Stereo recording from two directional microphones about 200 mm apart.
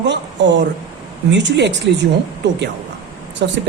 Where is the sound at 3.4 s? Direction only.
60° right (ahead or behind).